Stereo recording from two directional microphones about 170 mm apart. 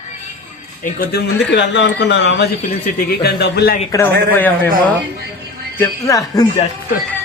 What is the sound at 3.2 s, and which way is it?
Speech, 70° left (ahead or behind).